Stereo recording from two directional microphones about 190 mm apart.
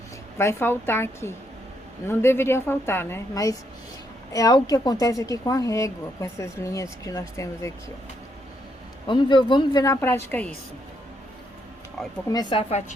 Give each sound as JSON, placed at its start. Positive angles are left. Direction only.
{"t": 0.3, "sound": "a woman's voice", "side_deg": 15}
{"t": 9.0, "sound": "speech", "side_deg": 25}
{"t": 12.0, "sound": "speech", "side_deg": 0}
{"t": 12.3, "sound": "speech", "side_deg": 25}